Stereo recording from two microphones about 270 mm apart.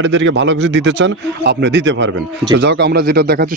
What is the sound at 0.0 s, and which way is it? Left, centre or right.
A man's voice, right.